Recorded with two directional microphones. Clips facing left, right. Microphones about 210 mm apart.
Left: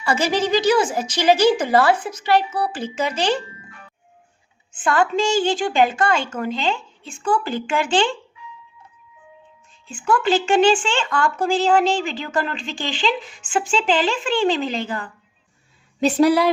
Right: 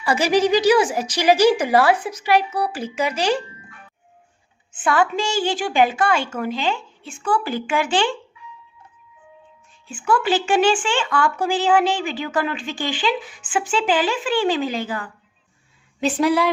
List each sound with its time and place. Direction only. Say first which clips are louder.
0.0 s speech: right 3 dB; 15° right (ahead or behind)
4.8 s speech: left 1 dB; 5° right (ahead or behind)
10.0 s speech: left 1 dB; 10° right (ahead or behind)
16.0 s speech: left 3 dB; 40° left (ahead or behind)